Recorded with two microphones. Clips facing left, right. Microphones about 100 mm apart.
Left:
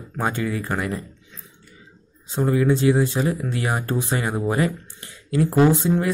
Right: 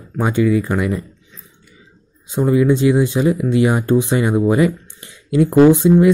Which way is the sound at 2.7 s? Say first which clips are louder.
Right 4 dB; 20° right (ahead or behind).